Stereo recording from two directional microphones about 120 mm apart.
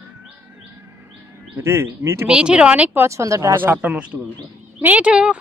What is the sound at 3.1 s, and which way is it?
Speech, 25° right (ahead or behind).